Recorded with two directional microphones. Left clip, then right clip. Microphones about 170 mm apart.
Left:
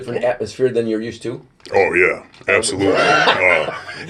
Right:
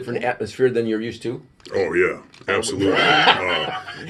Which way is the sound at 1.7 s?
25° right (ahead or behind).